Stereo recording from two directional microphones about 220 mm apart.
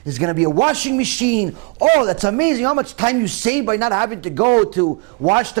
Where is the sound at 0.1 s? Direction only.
15° right (ahead or behind).